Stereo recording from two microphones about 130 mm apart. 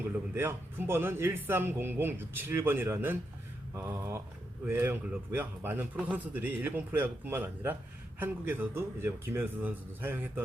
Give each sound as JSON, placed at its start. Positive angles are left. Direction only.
{"t": 0.1, "sound": "a man's voice", "side_deg": -15}